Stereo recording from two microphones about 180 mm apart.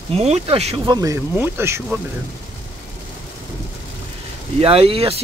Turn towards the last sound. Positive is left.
turn(degrees=-30)  # may be behind; listen again after turning